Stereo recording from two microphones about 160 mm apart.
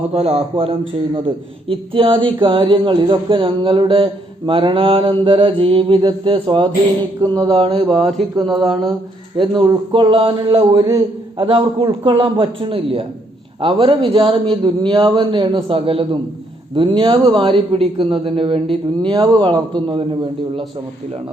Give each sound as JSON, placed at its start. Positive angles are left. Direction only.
{"t": 0.1, "sound": "speech", "side_deg": -40}
{"t": 7.2, "sound": "mantra", "side_deg": -25}
{"t": 8.4, "sound": "speech", "side_deg": 0}
{"t": 9.4, "sound": "speech", "side_deg": -30}